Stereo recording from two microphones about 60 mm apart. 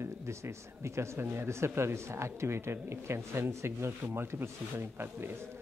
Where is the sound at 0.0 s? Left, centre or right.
Right.